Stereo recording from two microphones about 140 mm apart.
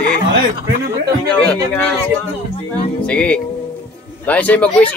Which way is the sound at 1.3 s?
10° left (ahead or behind).